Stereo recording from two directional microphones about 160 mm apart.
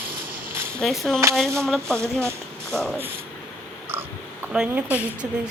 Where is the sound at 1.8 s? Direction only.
15° right (ahead or behind).